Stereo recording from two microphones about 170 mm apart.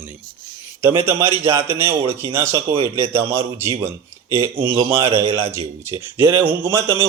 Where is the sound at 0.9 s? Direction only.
35° right (ahead or behind).